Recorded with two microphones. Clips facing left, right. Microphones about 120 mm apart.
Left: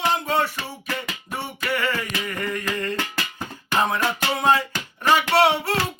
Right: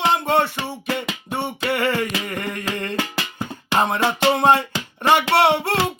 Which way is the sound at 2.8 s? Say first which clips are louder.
Right 2 dB; 20° right (ahead or behind).